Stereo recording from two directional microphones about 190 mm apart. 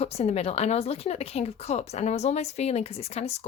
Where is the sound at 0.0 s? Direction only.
35° left (ahead or behind).